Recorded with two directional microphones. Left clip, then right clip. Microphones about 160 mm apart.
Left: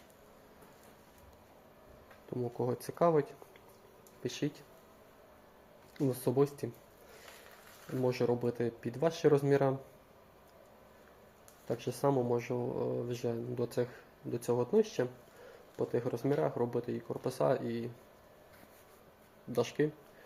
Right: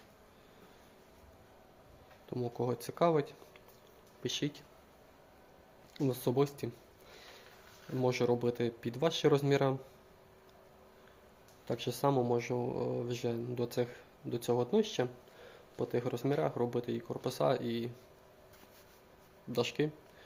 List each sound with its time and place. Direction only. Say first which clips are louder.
2.3 s speech: even; 15° right (ahead or behind)
6.0 s speech: left 1 dB; 15° right (ahead or behind)
7.9 s speech: right 1 dB; 20° right (ahead or behind)
11.7 s speech: even; 20° right (ahead or behind)
19.5 s speech: left 1 dB; 15° right (ahead or behind)